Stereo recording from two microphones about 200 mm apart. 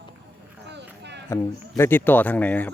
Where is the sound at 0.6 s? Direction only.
60° right (ahead or behind).